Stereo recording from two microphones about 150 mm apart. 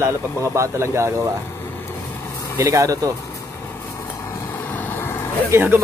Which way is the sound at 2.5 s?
20° right (ahead or behind).